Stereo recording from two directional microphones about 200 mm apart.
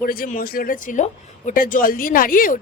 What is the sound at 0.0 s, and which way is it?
A woman's voice, 45° left (ahead or behind).